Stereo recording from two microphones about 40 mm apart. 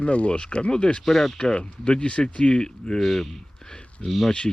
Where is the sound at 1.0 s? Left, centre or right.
Centre.